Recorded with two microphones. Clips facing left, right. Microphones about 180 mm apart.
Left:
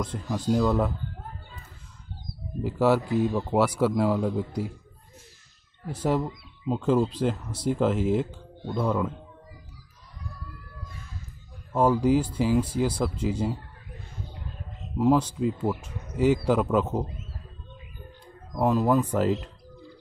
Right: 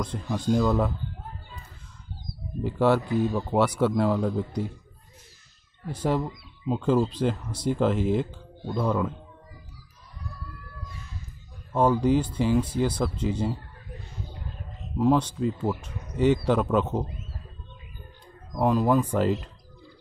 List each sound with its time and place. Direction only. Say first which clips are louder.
0.0 s speech: even; 5° left (ahead or behind)
2.6 s speech: even; 5° left (ahead or behind)
6.0 s speech: even; 5° left (ahead or behind)
11.7 s speech: even; 5° left (ahead or behind)
15.0 s speech: even; 5° left (ahead or behind)
18.5 s speech: even; centre (ahead or behind)